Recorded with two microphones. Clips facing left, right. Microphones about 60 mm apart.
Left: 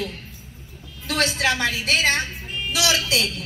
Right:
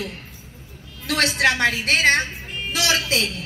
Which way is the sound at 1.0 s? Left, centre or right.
Right.